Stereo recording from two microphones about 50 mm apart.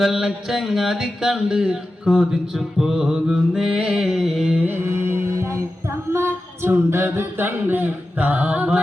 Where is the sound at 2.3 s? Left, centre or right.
Centre.